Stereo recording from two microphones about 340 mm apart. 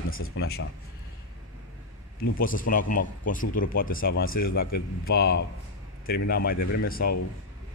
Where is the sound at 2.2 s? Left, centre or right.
Left.